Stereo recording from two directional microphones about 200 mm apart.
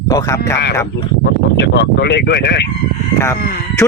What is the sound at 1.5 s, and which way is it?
A woman's voice, 55° left (ahead or behind).